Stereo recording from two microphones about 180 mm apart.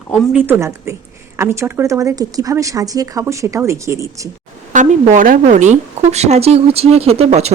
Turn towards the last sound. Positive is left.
turn(degrees=-35)  # may be behind; listen again after turning